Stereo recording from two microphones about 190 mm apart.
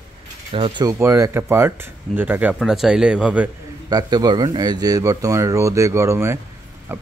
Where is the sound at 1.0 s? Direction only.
15° right (ahead or behind).